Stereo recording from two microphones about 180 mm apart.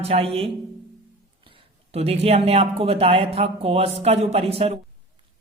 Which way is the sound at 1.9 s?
35° right (ahead or behind).